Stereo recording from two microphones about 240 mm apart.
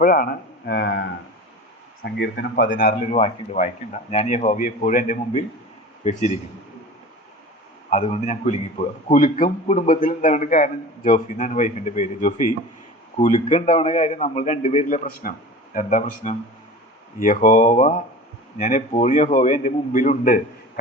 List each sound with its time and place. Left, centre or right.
0.0 s a man's voice: left
2.1 s speech: left
2.6 s a man's voice: left
7.9 s a man's voice: left